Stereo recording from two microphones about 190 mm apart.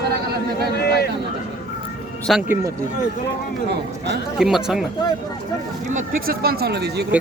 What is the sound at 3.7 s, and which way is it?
Speech, 60° right (ahead or behind).